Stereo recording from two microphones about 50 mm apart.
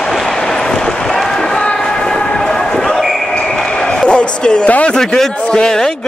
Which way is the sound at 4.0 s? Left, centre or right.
Centre.